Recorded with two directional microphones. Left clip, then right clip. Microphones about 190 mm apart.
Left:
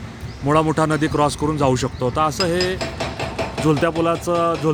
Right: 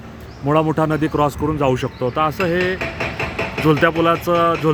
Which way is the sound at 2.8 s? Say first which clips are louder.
Right 2 dB; 30° left (ahead or behind).